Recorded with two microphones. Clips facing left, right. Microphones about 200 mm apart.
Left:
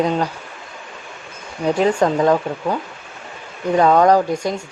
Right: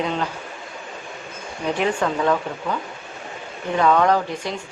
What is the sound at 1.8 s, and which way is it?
Speech, 35° left (ahead or behind).